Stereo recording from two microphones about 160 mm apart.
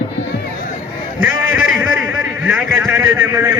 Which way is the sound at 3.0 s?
20° right (ahead or behind).